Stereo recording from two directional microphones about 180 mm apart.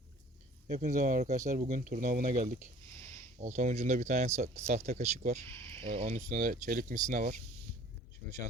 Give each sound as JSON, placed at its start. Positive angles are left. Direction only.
{"t": 0.7, "sound": "speech", "side_deg": -40}
{"t": 5.5, "sound": "a sound", "side_deg": 15}
{"t": 5.8, "sound": "speech", "side_deg": -35}